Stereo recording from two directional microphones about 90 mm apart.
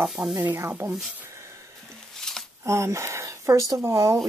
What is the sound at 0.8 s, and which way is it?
Speech, 30° right (ahead or behind).